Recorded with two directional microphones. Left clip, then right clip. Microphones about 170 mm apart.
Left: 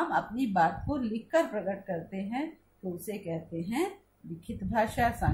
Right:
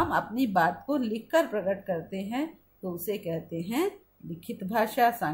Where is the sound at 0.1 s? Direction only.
60° right (ahead or behind).